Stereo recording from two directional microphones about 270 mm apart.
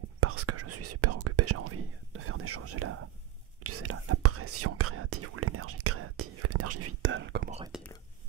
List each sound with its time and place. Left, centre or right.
0.2 s whispering: right
7.7 s whispering: centre